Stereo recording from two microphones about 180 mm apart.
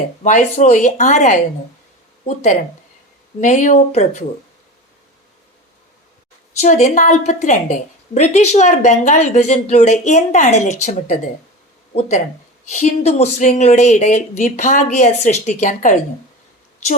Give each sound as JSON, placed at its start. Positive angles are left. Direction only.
{"t": 0.2, "sound": "a woman's voice", "side_deg": 40}
{"t": 6.6, "sound": "a woman's voice", "side_deg": 40}